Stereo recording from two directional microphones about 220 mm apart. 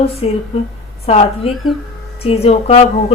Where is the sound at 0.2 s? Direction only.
30° left (ahead or behind).